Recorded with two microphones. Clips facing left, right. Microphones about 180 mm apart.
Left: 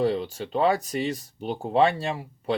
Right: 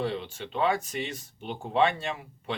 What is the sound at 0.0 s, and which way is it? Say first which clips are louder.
Speech: left 7 dB; 40° left (ahead or behind).